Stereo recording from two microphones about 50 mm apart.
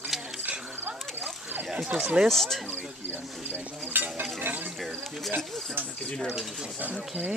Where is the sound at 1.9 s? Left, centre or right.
Centre.